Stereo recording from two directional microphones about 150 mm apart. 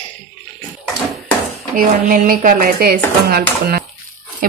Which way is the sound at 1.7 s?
70° right (ahead or behind).